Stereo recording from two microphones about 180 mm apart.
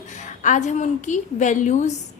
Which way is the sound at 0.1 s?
40° left (ahead or behind).